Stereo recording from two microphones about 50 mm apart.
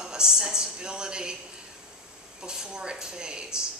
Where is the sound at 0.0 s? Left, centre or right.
Centre.